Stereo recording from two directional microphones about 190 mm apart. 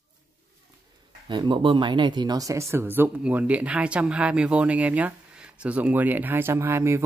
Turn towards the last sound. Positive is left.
turn(degrees=-15)  # may be behind; listen again after turning